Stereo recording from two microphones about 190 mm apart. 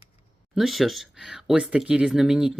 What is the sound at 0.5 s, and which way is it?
Speech, centre (ahead or behind).